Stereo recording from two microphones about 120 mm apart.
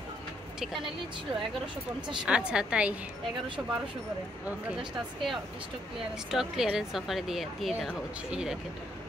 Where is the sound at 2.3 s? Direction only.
10° right (ahead or behind).